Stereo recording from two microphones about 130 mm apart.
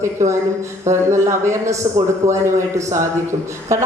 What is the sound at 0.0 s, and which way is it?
A woman's voice, 20° right (ahead or behind).